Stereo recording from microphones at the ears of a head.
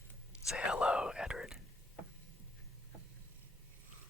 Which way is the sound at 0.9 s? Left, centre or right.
Centre.